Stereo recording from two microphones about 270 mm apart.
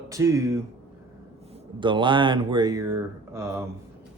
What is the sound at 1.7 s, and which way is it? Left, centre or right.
Speech, centre.